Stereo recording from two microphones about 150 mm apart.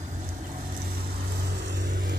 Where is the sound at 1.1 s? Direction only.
90° right.